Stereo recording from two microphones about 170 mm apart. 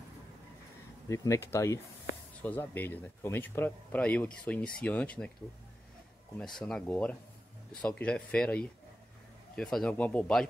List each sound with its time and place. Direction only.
1.0 s speech: 20° left (ahead or behind)
6.3 s speech: 5° left (ahead or behind)